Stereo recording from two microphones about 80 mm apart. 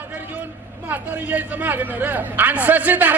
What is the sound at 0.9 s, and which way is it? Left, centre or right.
A man's voice, centre.